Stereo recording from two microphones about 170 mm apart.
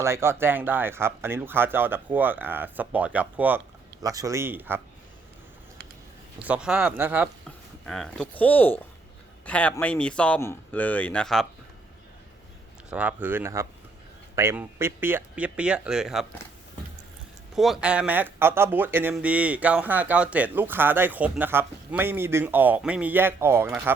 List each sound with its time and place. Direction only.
0.0 s speech: 15° right (ahead or behind)
4.0 s speech: 20° right (ahead or behind)
6.4 s speech: 5° right (ahead or behind)
7.9 s speech: 5° left (ahead or behind)
12.9 s speech: 10° right (ahead or behind)
17.5 s speech: centre (ahead or behind)